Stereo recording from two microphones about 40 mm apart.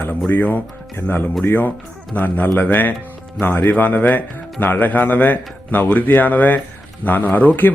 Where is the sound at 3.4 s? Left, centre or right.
Left.